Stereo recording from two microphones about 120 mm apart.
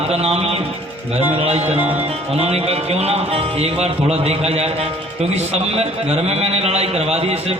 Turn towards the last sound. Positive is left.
turn(degrees=-60)  # may be behind; listen again after turning